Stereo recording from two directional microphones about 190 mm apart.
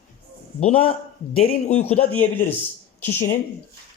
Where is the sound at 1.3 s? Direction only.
30° left (ahead or behind).